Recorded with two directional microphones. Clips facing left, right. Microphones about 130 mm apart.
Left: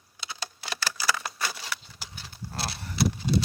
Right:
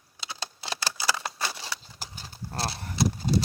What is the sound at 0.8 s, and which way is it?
Keys jangling, 30° right (ahead or behind).